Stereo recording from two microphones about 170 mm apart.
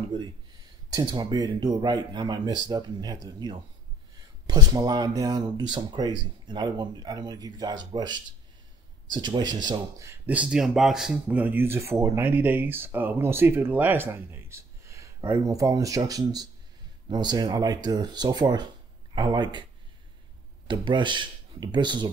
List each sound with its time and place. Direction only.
0.9 s speech: 25° right (ahead or behind)
20.6 s speech: 25° right (ahead or behind)